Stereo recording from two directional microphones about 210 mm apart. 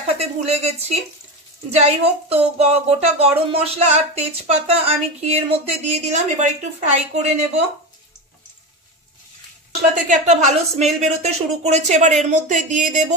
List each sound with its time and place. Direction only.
0.2 s speech: 30° right (ahead or behind)
10.0 s speech: 35° right (ahead or behind)